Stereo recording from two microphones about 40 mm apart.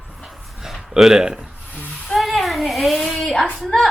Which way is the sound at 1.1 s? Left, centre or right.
Centre.